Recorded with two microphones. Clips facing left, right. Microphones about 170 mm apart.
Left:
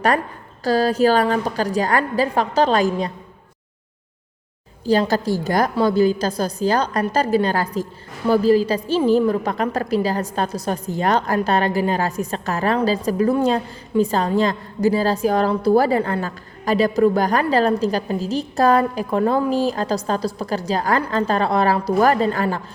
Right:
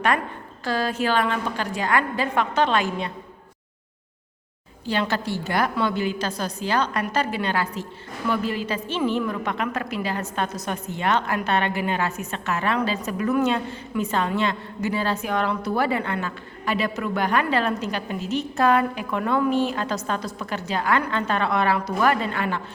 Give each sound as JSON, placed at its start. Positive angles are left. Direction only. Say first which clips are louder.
{"t": 0.6, "sound": "a woman's voice", "louder": "left 8 dB", "side_deg": 40}
{"t": 4.9, "sound": "a woman's voice", "louder": "left 7 dB", "side_deg": 40}